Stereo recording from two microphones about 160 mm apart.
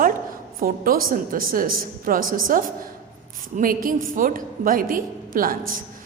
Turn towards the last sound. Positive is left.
turn(degrees=-60)  # may be behind; listen again after turning